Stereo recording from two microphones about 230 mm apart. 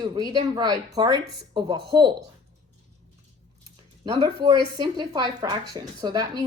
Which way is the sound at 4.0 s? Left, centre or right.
Centre.